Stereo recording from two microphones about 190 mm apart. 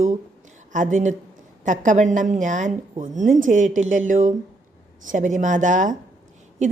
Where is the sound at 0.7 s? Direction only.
40° right (ahead or behind).